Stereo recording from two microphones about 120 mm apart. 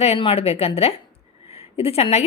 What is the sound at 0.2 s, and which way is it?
A woman's voice, 55° left (ahead or behind).